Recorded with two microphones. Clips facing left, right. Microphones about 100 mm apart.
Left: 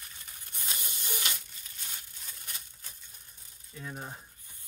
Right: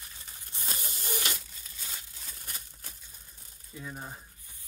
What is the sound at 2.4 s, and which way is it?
Crumpling, 50° right (ahead or behind).